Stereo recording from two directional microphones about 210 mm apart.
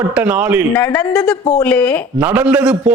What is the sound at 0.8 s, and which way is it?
A man's voice, 5° left (ahead or behind).